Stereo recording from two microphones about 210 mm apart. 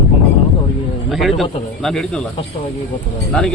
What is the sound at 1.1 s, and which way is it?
Speech, centre (ahead or behind).